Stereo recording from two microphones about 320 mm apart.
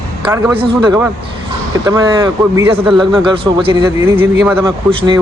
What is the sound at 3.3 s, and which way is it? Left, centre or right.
Speech, centre.